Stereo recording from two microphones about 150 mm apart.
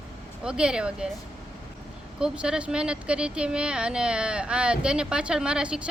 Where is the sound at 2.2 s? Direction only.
5° right (ahead or behind).